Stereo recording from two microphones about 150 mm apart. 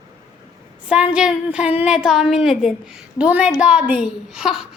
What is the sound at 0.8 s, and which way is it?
A woman's voice, 5° right (ahead or behind).